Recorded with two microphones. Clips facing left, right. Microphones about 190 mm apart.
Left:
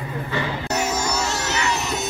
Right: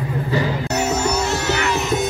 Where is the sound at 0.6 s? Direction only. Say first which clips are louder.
Right 4 dB; 65° right (ahead or behind).